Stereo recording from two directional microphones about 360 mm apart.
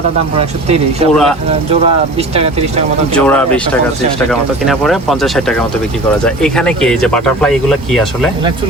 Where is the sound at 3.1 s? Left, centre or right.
Centre.